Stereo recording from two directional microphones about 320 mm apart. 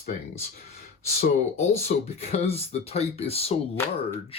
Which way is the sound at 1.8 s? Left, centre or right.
Centre.